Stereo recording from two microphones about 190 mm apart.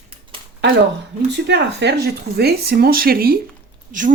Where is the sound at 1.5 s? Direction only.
65° right (ahead or behind).